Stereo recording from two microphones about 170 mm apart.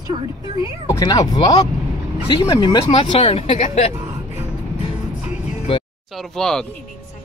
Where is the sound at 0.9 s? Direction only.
20° left (ahead or behind); by 3.9 s 40° left (ahead or behind).